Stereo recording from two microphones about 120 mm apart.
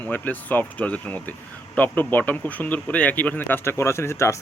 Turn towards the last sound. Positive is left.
turn(degrees=25)  # may be behind; listen again after turning